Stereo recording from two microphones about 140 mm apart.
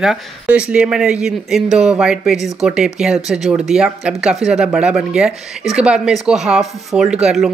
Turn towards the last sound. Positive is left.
turn(degrees=-5)  # may be behind; listen again after turning